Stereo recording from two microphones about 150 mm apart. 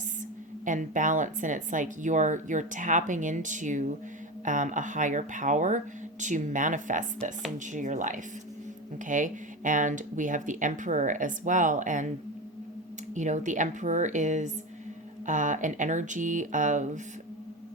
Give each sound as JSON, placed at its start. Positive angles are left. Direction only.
{"t": 0.6, "sound": "speech", "side_deg": -60}
{"t": 13.1, "sound": "speech", "side_deg": -55}